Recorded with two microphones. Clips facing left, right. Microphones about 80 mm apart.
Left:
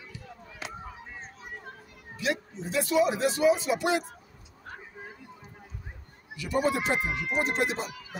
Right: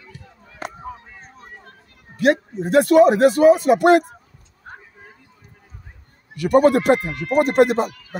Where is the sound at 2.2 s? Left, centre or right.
Right.